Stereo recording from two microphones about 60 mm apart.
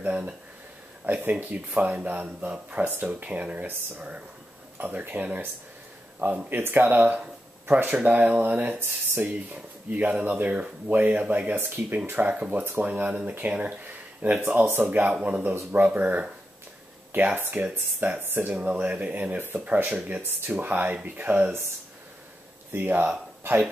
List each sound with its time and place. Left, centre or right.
0.0 s speech: right
4.7 s speech: right
7.9 s speech: right
11.6 s speech: right
18.5 s speech: right
22.7 s speech: right